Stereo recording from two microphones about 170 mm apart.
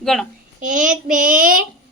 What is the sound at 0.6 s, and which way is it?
Speech, 50° right (ahead or behind).